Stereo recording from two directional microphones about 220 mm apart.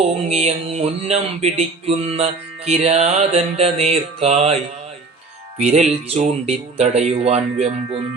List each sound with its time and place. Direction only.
0.3 s music: 30° right (ahead or behind)
5.5 s music: 30° right (ahead or behind)